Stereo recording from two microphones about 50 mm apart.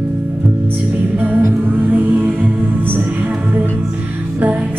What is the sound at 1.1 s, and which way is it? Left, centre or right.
Music, right.